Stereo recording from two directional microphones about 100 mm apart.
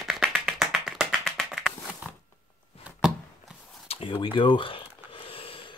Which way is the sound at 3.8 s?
65° left (ahead or behind).